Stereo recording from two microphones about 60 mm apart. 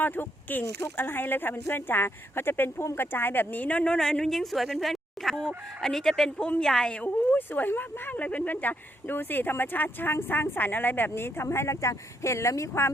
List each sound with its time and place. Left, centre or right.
0.0 s speech: left
4.0 s a woman's voice: centre
7.3 s speech: left